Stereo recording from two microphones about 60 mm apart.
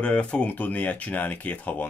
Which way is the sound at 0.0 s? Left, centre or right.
Left.